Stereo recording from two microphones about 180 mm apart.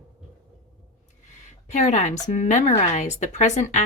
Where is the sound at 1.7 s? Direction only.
40° left (ahead or behind).